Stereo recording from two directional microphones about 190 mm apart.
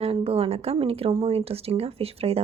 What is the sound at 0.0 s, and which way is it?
Speech, 30° right (ahead or behind).